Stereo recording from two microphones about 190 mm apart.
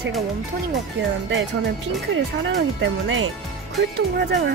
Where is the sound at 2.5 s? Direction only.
75° right (ahead or behind).